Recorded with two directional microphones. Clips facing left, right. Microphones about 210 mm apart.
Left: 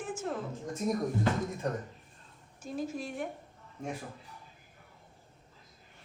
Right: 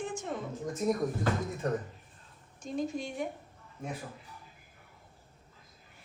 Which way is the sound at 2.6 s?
5° left (ahead or behind).